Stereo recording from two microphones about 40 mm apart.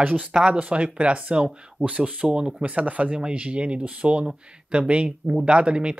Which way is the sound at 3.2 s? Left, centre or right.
Right.